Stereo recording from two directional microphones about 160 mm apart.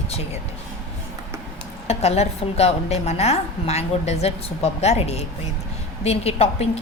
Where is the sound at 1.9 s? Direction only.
40° left (ahead or behind).